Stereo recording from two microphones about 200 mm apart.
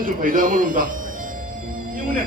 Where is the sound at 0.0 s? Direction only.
45° right (ahead or behind).